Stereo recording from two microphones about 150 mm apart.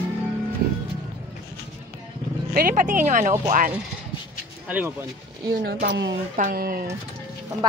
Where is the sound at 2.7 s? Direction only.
55° right (ahead or behind).